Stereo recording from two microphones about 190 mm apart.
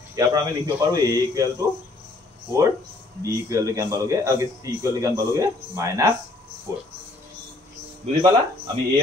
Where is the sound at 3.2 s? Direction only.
15° right (ahead or behind).